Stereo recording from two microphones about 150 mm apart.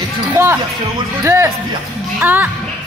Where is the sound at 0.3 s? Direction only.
15° right (ahead or behind).